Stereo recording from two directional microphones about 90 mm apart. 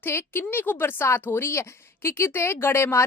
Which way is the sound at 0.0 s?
25° left (ahead or behind).